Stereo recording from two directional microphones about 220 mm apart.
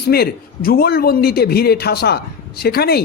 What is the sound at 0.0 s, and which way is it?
A man's voice, 45° left (ahead or behind).